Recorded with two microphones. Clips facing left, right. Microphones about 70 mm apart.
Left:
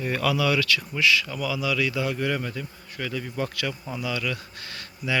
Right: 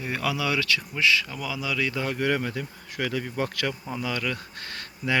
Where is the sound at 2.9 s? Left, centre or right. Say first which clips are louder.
Right 3 dB; right.